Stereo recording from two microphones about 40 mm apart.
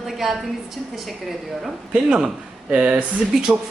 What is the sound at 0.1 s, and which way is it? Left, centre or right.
Speech, centre.